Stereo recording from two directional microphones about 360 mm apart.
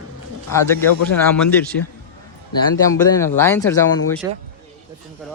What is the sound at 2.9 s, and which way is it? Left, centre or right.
Speech, centre.